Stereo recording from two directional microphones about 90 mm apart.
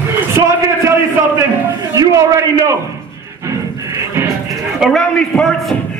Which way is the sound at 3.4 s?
35° right (ahead or behind).